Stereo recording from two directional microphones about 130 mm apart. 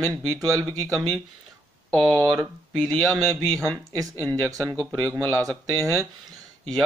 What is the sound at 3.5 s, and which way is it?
Speech, 25° right (ahead or behind).